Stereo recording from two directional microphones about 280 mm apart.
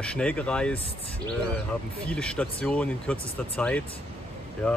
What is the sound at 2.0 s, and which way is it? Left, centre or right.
Speech, centre.